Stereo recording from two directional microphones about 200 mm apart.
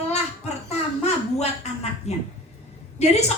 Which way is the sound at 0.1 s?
35° left (ahead or behind).